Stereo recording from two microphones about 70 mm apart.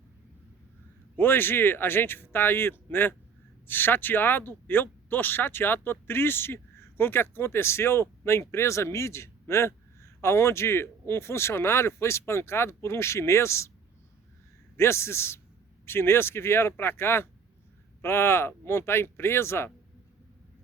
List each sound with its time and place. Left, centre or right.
1.1 s speech: left
14.8 s speech: left